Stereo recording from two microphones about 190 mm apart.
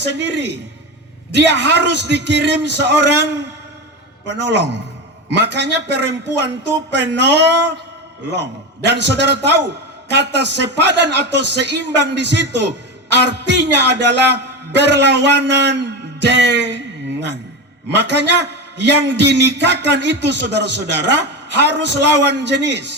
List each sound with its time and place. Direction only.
0.0 s a man's voice: 65° right (ahead or behind)
4.3 s a man's voice: 65° right (ahead or behind)
8.9 s a man's voice: 65° right (ahead or behind)
17.8 s a man's voice: 65° right (ahead or behind)